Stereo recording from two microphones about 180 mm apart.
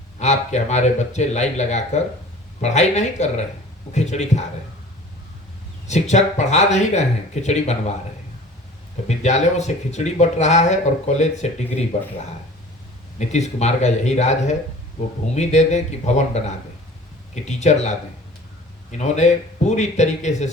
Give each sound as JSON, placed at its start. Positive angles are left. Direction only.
{"t": 0.2, "sound": "speech", "side_deg": 40}
{"t": 5.9, "sound": "speech", "side_deg": 40}
{"t": 9.0, "sound": "speech", "side_deg": 40}
{"t": 13.1, "sound": "speech", "side_deg": 40}
{"t": 17.6, "sound": "speech", "side_deg": 40}